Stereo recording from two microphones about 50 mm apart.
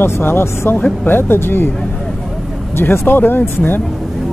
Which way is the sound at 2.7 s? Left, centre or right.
Left.